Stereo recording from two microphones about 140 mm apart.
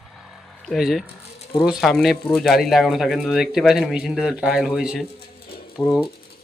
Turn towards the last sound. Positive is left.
turn(degrees=30)  # may be behind; listen again after turning